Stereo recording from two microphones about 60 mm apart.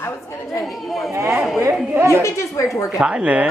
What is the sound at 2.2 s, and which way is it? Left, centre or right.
Speech, left.